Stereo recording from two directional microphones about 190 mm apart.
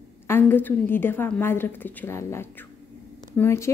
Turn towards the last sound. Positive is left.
turn(degrees=15)  # may be behind; listen again after turning